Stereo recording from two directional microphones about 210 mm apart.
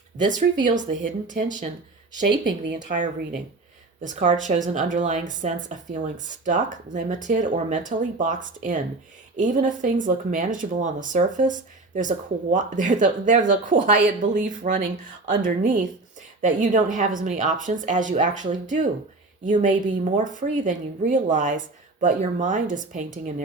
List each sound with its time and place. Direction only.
0.3 s speech: 35° right (ahead or behind)
2.7 s speech: 35° right (ahead or behind)